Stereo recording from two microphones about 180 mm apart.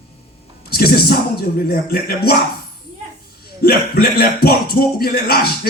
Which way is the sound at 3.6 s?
60° left (ahead or behind).